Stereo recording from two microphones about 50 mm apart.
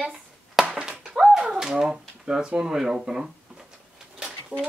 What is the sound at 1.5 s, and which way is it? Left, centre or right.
Speech, centre.